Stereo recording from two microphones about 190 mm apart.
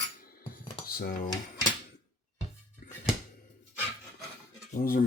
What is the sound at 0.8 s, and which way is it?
Dishes, 50° left (ahead or behind).